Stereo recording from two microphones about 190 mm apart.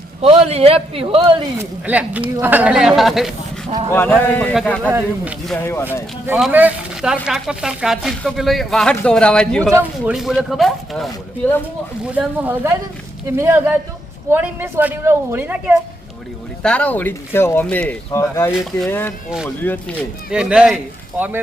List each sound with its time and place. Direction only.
0.2 s a man's voice: 30° right (ahead or behind)
1.5 s speech: 10° right (ahead or behind)
3.9 s speech: 10° left (ahead or behind)
4.9 s speech: 10° right (ahead or behind)
5.5 s speech: 10° left (ahead or behind)
6.2 s speech: 5° right (ahead or behind)
12.0 s speech: 5° right (ahead or behind)
16.6 s speech: 5° left (ahead or behind)
18.5 s speech: centre (ahead or behind)
18.9 s speech: 10° left (ahead or behind)
20.3 s speech: 5° right (ahead or behind)